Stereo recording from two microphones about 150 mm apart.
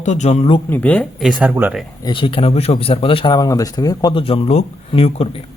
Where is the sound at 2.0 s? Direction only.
35° left (ahead or behind).